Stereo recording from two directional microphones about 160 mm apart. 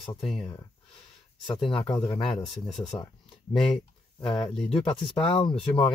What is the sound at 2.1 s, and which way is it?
Speech, 30° left (ahead or behind).